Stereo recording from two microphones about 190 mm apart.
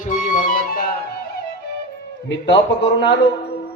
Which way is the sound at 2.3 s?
70° left (ahead or behind).